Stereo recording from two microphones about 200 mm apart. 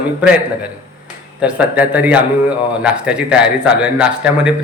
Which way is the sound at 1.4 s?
5° right (ahead or behind).